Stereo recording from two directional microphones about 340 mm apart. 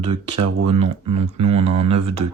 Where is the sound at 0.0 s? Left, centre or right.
Centre.